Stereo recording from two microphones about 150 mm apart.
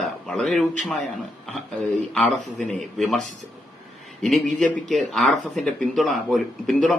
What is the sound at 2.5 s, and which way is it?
A man's voice, centre (ahead or behind).